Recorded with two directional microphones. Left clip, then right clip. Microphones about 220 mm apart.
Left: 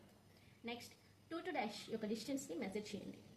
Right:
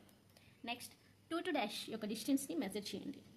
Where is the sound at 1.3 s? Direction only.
45° right (ahead or behind).